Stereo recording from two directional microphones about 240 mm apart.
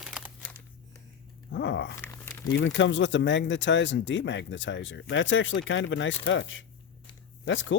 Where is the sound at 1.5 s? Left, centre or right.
Left.